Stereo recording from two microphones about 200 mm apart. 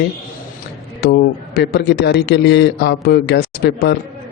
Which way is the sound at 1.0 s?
55° left (ahead or behind).